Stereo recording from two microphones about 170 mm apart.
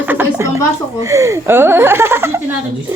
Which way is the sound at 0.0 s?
10° right (ahead or behind).